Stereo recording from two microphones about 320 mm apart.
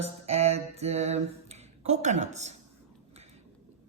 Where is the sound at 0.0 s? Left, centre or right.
Centre.